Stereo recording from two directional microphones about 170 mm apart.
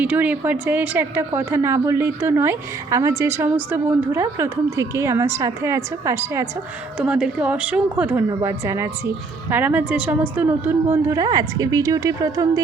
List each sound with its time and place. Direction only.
0.0 s a woman's voice: 10° right (ahead or behind)